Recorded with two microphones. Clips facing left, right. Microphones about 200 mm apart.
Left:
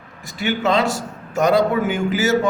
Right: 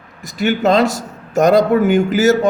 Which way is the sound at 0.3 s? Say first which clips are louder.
Right 5 dB; 40° right (ahead or behind).